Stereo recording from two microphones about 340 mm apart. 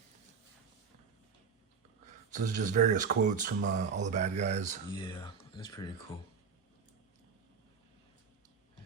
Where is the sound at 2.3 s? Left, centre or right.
Right.